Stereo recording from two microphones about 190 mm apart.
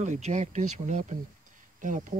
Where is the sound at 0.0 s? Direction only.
40° right (ahead or behind).